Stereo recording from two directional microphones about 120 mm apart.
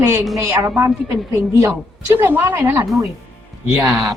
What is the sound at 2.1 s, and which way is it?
Speech, 15° right (ahead or behind).